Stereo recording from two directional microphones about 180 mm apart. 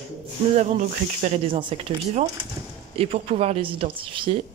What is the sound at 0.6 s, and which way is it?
Speech, 40° right (ahead or behind).